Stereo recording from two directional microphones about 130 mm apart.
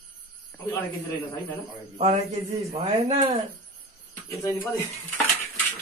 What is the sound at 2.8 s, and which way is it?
Speech, 60° right (ahead or behind).